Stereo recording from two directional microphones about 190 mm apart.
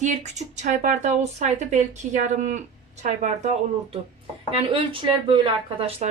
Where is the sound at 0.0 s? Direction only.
40° right (ahead or behind).